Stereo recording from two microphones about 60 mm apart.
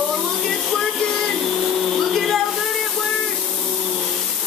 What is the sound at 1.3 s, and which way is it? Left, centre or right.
Vacuum cleaner, centre.